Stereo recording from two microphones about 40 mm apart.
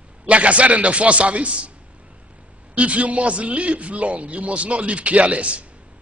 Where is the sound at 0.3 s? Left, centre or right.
Right.